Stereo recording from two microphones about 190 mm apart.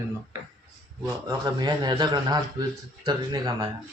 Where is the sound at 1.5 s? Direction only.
25° right (ahead or behind).